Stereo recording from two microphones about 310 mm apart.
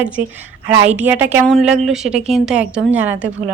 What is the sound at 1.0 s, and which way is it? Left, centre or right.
A woman's voice, centre.